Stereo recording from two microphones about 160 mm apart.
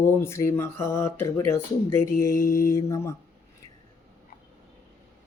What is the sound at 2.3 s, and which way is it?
Mantra, 60° left (ahead or behind).